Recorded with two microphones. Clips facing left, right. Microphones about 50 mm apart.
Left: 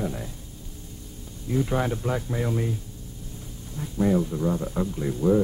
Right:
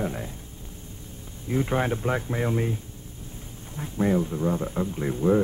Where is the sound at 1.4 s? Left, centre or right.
Right.